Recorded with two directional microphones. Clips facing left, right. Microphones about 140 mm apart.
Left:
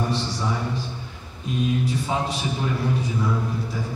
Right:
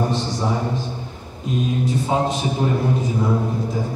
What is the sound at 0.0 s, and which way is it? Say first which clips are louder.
Speech: right 4 dB; 40° right (ahead or behind).